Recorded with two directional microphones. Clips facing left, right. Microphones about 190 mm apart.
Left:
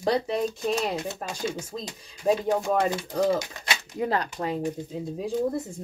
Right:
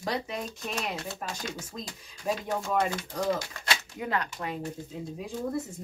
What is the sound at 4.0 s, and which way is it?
Speech, 35° left (ahead or behind).